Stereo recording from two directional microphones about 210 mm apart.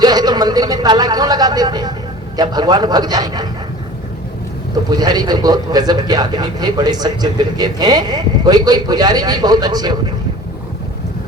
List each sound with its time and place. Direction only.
0.0 s speech: 20° right (ahead or behind)
4.9 s speech: 20° right (ahead or behind)